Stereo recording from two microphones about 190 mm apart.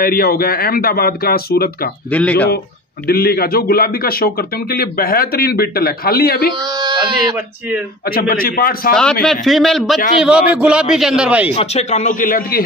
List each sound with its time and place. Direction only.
0.0 s a man's voice: 50° left (ahead or behind)
2.0 s speech: 10° left (ahead or behind)
3.1 s a man's voice: 55° left (ahead or behind)
6.6 s speech: 20° right (ahead or behind)
8.0 s a man's voice: 50° left (ahead or behind)
8.9 s a man's voice: 5° left (ahead or behind)
11.5 s a man's voice: 35° left (ahead or behind); by 12.6 s 50° left (ahead or behind)